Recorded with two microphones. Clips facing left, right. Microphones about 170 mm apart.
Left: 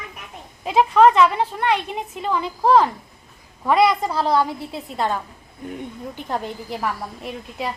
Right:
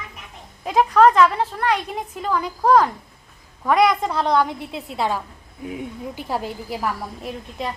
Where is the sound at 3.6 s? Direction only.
5° left (ahead or behind).